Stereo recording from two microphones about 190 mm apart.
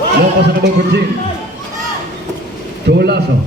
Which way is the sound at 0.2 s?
55° right (ahead or behind).